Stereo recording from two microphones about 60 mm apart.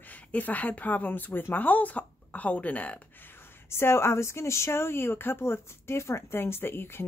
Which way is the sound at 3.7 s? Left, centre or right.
Left.